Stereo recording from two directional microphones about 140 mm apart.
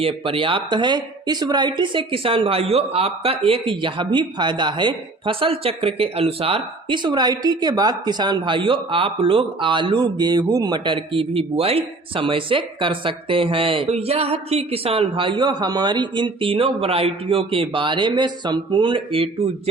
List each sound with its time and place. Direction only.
0.0 s speech: 40° right (ahead or behind)